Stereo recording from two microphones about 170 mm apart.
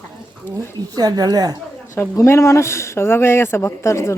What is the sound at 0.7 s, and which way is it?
Speech, 25° right (ahead or behind).